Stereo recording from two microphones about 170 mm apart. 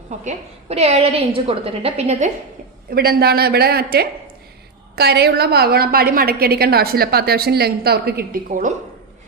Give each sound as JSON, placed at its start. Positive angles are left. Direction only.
{"t": 0.3, "sound": "a woman's voice", "side_deg": -40}
{"t": 2.9, "sound": "a woman's voice", "side_deg": -65}